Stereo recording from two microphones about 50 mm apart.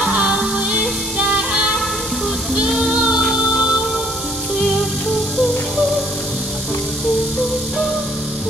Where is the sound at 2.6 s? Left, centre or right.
Centre.